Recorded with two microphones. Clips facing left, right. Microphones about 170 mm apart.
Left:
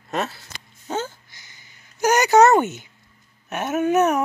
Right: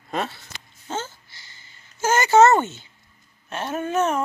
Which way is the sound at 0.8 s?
15° left (ahead or behind).